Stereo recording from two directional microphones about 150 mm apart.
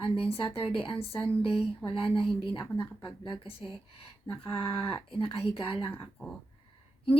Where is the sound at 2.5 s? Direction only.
15° left (ahead or behind).